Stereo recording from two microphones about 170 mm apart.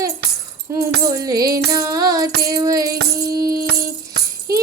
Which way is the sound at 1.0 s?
20° right (ahead or behind).